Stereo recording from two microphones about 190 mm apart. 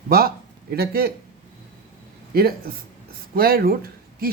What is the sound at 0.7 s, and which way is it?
Speech, 55° right (ahead or behind).